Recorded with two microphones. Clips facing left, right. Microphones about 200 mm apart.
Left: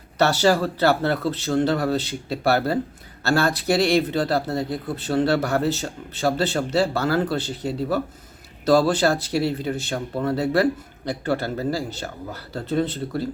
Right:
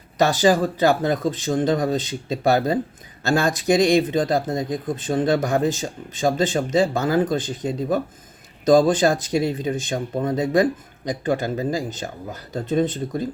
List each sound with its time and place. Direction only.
0.2 s speech: 15° right (ahead or behind)